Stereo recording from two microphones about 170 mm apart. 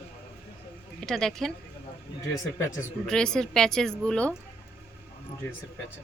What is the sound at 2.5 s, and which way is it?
Speech, 15° left (ahead or behind).